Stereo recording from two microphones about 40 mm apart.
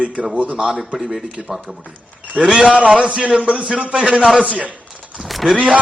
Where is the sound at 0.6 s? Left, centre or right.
Centre.